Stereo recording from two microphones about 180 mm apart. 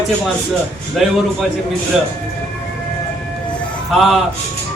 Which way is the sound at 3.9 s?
Centre (ahead or behind).